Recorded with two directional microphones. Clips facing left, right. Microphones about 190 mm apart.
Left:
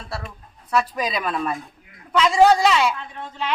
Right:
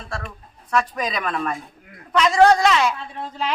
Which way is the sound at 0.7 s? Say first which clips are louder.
Even; 5° left (ahead or behind).